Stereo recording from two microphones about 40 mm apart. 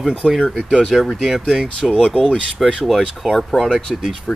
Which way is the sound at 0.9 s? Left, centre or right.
Centre.